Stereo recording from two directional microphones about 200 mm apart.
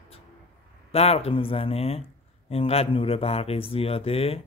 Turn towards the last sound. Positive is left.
turn(degrees=30)  # may be behind; listen again after turning